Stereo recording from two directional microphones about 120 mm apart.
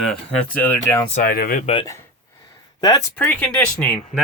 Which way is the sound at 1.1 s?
80° left.